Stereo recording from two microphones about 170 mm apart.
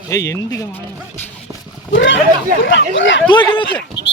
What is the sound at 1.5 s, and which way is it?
Speech, 20° right (ahead or behind).